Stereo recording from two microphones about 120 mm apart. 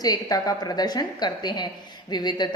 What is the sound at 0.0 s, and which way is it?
A woman's voice, 30° left (ahead or behind).